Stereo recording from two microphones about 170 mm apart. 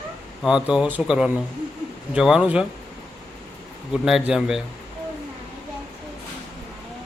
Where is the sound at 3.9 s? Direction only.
5° right (ahead or behind).